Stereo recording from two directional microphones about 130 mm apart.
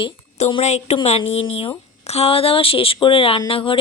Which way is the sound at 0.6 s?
60° left (ahead or behind).